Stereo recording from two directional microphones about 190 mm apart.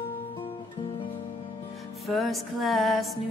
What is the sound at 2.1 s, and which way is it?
Music, centre (ahead or behind).